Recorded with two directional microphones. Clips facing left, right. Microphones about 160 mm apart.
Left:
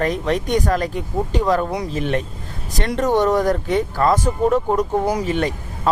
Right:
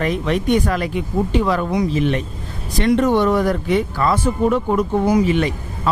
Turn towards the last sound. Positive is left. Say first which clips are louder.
# right 1 dB
turn(degrees=45)  # may be behind; listen again after turning